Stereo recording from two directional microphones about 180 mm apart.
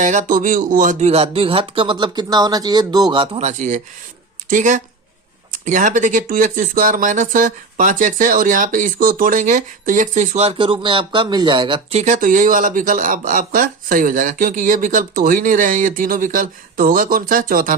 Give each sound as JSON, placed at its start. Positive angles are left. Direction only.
{"t": 0.0, "sound": "speech", "side_deg": -45}